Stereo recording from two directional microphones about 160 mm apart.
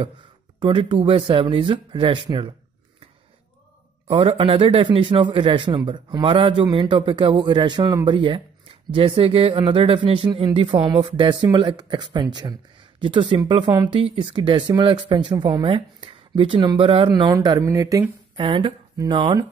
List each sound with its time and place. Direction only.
0.6 s a man's voice: 30° right (ahead or behind)
4.1 s a man's voice: 35° right (ahead or behind)
18.3 s speech: 30° right (ahead or behind)